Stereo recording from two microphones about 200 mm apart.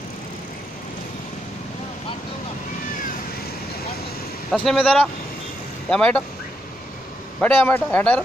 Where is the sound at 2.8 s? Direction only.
40° left (ahead or behind).